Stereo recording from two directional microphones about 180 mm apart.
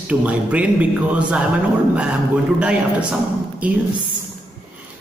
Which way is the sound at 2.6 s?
5° right (ahead or behind).